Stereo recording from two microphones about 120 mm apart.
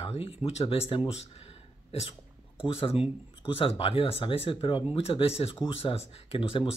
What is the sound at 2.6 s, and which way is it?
Speech, 50° left (ahead or behind).